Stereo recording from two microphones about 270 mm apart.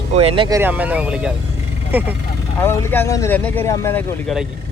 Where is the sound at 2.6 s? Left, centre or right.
Centre.